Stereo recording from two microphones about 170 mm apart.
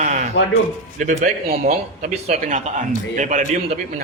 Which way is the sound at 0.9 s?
45° right (ahead or behind).